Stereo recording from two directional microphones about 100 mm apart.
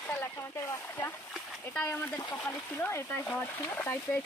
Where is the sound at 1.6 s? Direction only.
15° left (ahead or behind).